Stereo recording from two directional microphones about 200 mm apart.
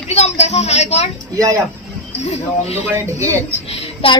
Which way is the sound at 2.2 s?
30° left (ahead or behind).